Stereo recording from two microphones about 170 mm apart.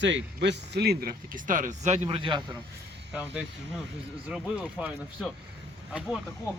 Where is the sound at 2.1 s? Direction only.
30° right (ahead or behind).